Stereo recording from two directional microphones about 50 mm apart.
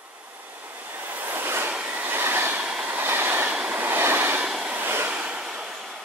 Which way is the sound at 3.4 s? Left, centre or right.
Right.